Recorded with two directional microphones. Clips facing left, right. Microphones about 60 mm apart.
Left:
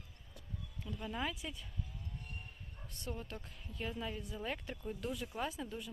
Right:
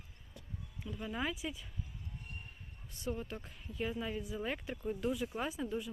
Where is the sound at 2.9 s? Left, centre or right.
Centre.